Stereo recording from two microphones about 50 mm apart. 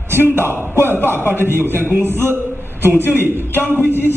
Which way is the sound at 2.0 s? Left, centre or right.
Right.